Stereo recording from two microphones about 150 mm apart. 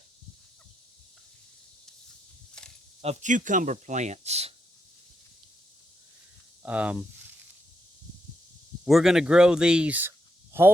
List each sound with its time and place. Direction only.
3.0 s speech: 50° right (ahead or behind)
6.6 s speech: 10° right (ahead or behind)
8.8 s speech: centre (ahead or behind)